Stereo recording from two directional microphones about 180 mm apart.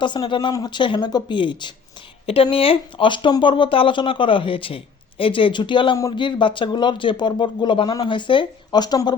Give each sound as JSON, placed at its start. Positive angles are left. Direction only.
{"t": 0.0, "sound": "speech", "side_deg": 25}